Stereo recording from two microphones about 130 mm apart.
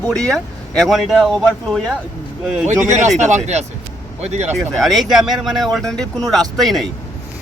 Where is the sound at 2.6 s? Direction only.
65° right (ahead or behind).